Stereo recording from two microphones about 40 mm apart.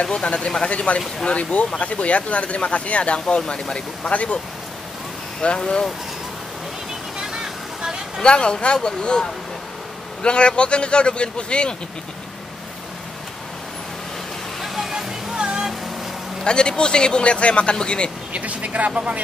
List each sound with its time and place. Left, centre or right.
0.0 s speech: left
4.1 s speech: left
5.4 s speech: left
7.2 s a sound: centre
8.2 s speech: left
14.6 s a sound: centre
15.4 s a sound: centre
16.4 s speech: left
18.3 s speech: right